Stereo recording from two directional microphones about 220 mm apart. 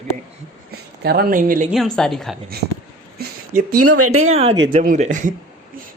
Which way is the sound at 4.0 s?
75° right (ahead or behind).